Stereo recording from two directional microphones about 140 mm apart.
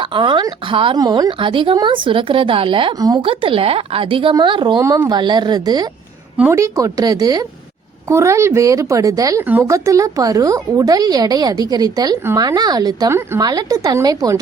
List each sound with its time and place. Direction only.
0.0 s a woman's voice: 35° right (ahead or behind)